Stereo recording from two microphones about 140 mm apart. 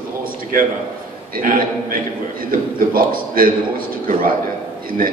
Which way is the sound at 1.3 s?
90° right.